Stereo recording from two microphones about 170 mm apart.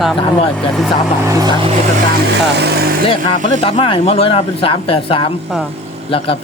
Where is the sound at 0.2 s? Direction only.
35° left (ahead or behind).